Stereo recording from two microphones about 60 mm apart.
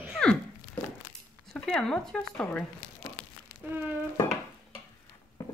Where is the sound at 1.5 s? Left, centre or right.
Centre.